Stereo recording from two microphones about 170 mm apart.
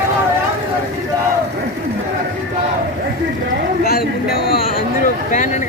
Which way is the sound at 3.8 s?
65° left (ahead or behind).